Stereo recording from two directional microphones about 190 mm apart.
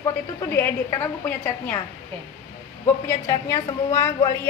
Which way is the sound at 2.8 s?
15° left (ahead or behind).